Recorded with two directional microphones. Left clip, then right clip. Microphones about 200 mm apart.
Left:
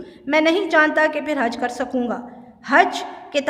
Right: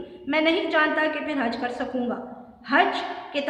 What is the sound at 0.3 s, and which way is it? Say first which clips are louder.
A woman's voice: left 5 dB; 55° left (ahead or behind).